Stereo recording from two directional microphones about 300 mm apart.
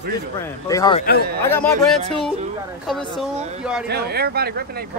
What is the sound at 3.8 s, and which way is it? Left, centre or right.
Speech, right.